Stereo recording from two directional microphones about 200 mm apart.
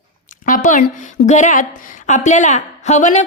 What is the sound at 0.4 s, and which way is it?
A woman's voice, 40° left (ahead or behind).